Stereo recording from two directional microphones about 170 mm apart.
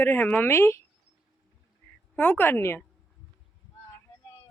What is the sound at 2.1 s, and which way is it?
Speech, 10° left (ahead or behind).